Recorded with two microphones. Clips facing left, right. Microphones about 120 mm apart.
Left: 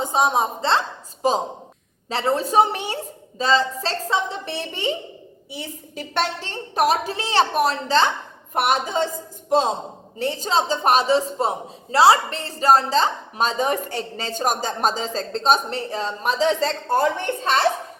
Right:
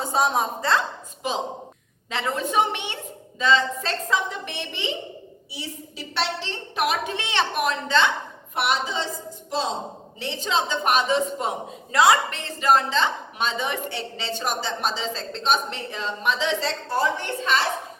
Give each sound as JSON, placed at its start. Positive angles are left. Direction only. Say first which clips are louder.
{"t": 0.0, "sound": "a woman's voice", "louder": "left 3 dB", "side_deg": 20}